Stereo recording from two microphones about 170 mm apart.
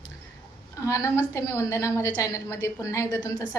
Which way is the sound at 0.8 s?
15° left (ahead or behind).